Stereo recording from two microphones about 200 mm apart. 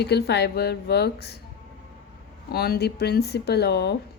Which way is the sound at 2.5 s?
50° left (ahead or behind).